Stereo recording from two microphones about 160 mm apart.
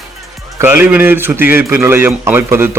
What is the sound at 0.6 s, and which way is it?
A man's voice, 15° right (ahead or behind).